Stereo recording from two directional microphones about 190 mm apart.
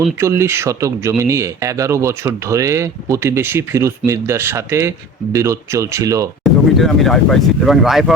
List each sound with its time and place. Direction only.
0.2 s speech: 15° right (ahead or behind)
6.4 s speech: centre (ahead or behind)